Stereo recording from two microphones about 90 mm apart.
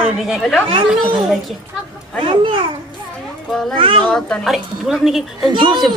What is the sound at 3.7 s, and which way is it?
Speech, 70° right (ahead or behind).